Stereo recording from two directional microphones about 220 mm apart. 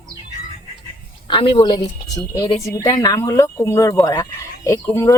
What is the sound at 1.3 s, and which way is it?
Speech, 25° left (ahead or behind).